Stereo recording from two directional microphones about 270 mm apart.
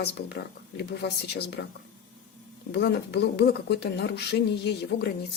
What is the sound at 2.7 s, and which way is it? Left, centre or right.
Speech, left.